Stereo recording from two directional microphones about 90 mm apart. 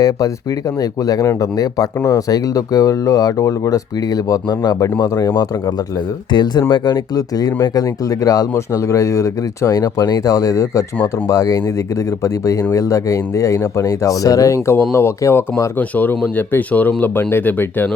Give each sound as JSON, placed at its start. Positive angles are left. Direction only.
{"t": 0.8, "sound": "speech", "side_deg": 40}
{"t": 12.7, "sound": "speech", "side_deg": 35}